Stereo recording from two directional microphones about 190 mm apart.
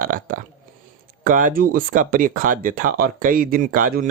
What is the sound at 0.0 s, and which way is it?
Burping, 45° right (ahead or behind).